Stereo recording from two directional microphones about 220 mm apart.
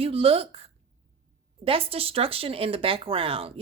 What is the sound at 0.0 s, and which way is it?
A woman's voice, 25° right (ahead or behind).